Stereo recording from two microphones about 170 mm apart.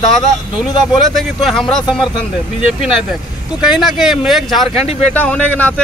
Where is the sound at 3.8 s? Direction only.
5° right (ahead or behind).